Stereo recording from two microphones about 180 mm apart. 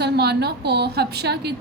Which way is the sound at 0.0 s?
65° right (ahead or behind).